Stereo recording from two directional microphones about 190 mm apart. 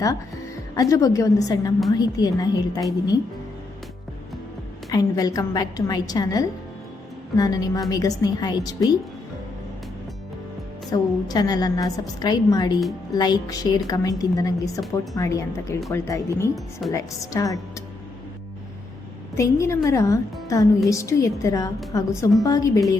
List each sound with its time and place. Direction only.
0.8 s a woman's voice: 20° left (ahead or behind)
4.9 s a woman's voice: 20° left (ahead or behind)
10.9 s a woman's voice: 20° left (ahead or behind)
19.4 s a woman's voice: 15° left (ahead or behind)